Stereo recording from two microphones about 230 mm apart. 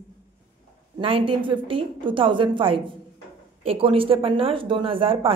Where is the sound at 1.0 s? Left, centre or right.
Right.